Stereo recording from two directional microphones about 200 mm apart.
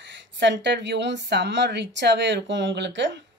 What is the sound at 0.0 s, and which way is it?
Speech, 60° right (ahead or behind).